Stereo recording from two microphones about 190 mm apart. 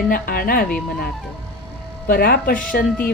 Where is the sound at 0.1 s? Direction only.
50° left (ahead or behind).